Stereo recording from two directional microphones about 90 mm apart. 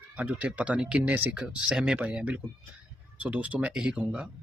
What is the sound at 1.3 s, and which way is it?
Speech, 10° right (ahead or behind).